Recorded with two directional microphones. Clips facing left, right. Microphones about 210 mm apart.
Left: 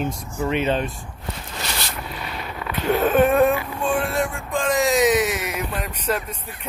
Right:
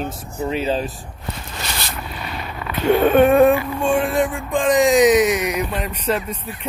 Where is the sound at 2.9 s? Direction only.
Centre (ahead or behind).